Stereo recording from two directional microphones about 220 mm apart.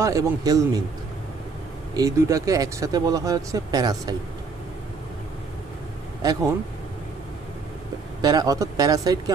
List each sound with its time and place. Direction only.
0.0 s speech: 15° right (ahead or behind)
2.0 s speech: 15° right (ahead or behind)
8.2 s speech: 15° right (ahead or behind)